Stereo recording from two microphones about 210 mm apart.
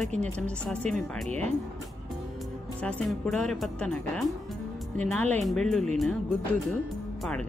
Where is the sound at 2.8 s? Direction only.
5° left (ahead or behind).